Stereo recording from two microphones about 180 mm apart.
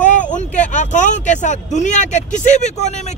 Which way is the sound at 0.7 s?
40° left (ahead or behind).